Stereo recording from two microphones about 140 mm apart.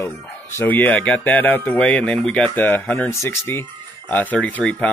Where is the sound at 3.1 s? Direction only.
20° left (ahead or behind).